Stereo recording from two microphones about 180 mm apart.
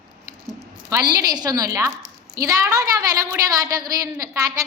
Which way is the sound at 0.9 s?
20° right (ahead or behind).